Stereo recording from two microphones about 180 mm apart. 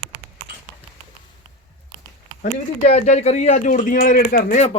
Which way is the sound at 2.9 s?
40° left (ahead or behind).